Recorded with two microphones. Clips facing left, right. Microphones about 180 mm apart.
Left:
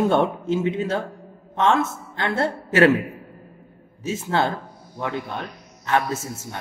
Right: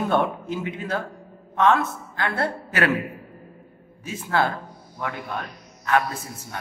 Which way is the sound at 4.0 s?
25° left (ahead or behind).